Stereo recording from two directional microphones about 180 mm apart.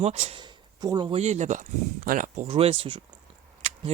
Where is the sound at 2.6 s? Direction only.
30° right (ahead or behind).